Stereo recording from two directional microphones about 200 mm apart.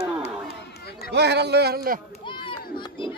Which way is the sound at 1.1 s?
55° right (ahead or behind).